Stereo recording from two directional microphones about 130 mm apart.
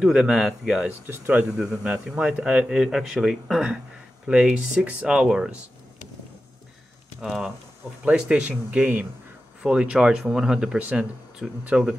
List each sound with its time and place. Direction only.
0.0 s speech: 5° right (ahead or behind)
1.0 s speech: 15° right (ahead or behind)
1.6 s speech: 5° right (ahead or behind)
7.2 s speech: centre (ahead or behind)